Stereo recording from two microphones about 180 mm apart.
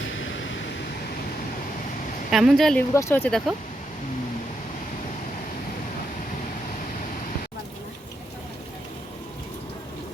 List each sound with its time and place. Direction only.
0.1 s a sound: 90° left
2.3 s a woman's voice: centre (ahead or behind)
2.9 s speech: 15° left (ahead or behind)